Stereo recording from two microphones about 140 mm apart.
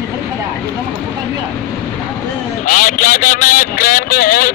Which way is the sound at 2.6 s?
70° left (ahead or behind).